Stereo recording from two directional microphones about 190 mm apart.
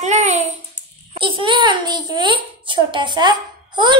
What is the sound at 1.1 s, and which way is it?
A child's voice, 25° right (ahead or behind).